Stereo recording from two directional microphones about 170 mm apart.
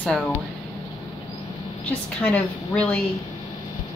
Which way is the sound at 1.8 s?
10° left (ahead or behind).